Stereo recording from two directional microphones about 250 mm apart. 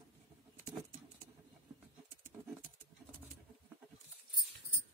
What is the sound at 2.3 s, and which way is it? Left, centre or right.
Pigeon, centre.